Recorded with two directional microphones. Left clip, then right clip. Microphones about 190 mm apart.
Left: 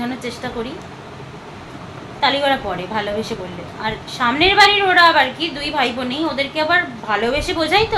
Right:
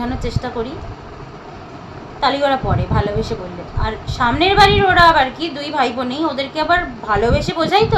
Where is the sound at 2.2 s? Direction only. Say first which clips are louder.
Right 1 dB; 10° right (ahead or behind).